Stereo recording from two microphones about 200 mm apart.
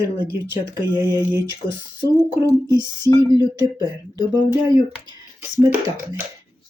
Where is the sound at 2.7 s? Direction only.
15° right (ahead or behind).